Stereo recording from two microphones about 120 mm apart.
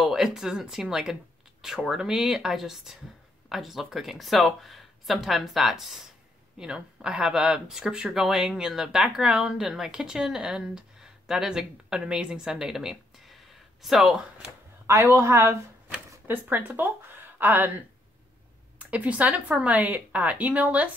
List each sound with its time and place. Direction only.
0.0 s speech: 5° right (ahead or behind)
15.1 s speech: 20° right (ahead or behind)
18.8 s speech: 10° right (ahead or behind)